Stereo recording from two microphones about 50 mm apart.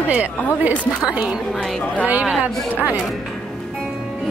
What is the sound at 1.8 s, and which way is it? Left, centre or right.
Speech, left.